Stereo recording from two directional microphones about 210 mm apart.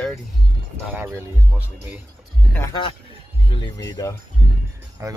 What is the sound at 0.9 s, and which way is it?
Speech, 10° right (ahead or behind).